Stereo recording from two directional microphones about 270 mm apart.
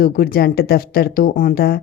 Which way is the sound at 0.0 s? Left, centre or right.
Left.